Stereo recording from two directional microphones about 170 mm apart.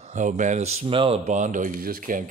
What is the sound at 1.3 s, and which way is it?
Speech, 45° right (ahead or behind).